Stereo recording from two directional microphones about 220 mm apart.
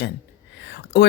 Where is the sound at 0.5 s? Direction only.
55° left (ahead or behind).